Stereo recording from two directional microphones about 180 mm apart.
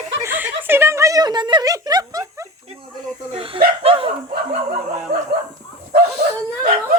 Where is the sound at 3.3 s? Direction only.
30° right (ahead or behind).